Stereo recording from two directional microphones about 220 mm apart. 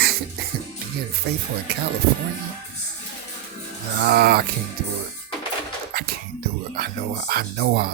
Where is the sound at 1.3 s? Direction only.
45° right (ahead or behind).